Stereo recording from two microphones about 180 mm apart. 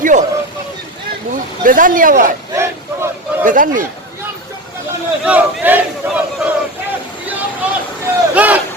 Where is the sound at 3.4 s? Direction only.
50° right (ahead or behind).